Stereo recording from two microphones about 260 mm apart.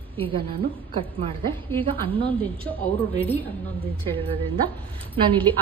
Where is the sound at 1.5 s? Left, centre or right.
Centre.